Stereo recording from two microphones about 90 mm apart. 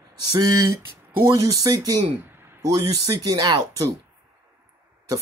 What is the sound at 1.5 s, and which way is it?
Speech, 45° right (ahead or behind).